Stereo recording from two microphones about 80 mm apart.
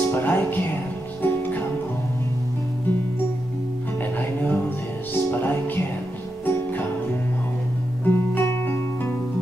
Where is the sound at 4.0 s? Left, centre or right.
Left.